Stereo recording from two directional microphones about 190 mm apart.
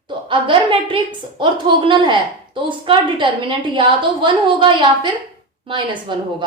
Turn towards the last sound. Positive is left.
turn(degrees=-25)  # may be behind; listen again after turning